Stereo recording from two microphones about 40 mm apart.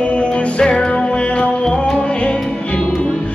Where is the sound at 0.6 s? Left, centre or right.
Left.